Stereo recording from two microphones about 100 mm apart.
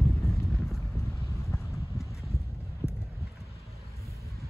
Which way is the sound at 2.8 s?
25° left (ahead or behind).